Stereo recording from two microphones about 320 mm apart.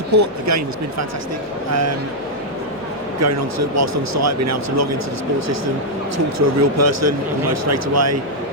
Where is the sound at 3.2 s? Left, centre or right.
Right.